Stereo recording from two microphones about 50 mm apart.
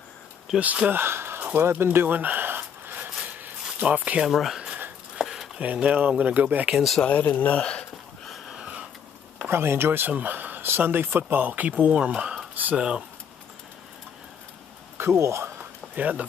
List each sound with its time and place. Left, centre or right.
0.5 s speech: centre
0.8 s speech: right
1.6 s a sound: right
4.3 s speech: centre
5.2 s a sound: centre
5.6 s speech: right
6.7 s speech: centre
7.1 s speech: left
8.5 s a sound: right
9.5 s speech: right
10.1 s speech: right
11.9 s speech: centre
15.0 s speech: right
15.9 s speech: right